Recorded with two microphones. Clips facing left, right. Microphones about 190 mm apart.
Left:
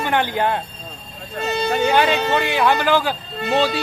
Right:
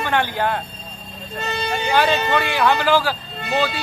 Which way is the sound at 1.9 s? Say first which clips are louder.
Right 3 dB; 15° left (ahead or behind).